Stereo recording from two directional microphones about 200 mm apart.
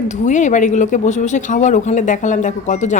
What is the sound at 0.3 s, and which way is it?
Speech, 40° left (ahead or behind).